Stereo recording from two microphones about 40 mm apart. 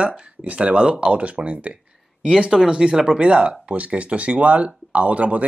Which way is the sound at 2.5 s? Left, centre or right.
Centre.